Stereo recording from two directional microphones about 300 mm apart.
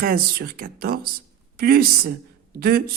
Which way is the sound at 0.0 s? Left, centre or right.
Right.